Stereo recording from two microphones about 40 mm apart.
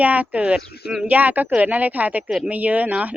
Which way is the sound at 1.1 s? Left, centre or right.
Right.